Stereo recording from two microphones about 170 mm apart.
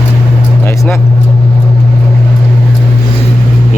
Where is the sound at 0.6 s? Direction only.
15° left (ahead or behind).